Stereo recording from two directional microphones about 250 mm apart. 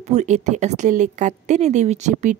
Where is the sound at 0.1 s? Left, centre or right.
Right.